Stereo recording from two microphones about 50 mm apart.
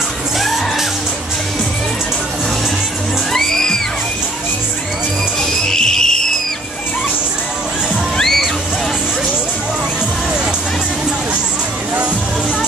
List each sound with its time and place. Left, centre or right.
3.3 s music: centre
5.7 s a sound: centre
8.2 s music: centre